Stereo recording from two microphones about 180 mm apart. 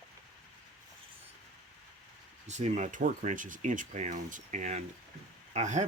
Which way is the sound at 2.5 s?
40° right (ahead or behind).